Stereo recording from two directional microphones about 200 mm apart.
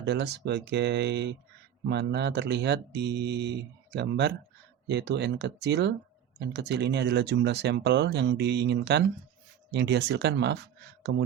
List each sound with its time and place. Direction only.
0.0 s speech: 60° right (ahead or behind)
11.1 s speech: 75° right (ahead or behind)